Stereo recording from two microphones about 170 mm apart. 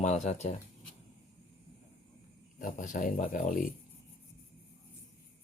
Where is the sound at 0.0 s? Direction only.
45° left (ahead or behind).